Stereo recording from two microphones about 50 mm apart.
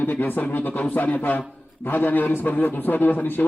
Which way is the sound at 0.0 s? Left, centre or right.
Left.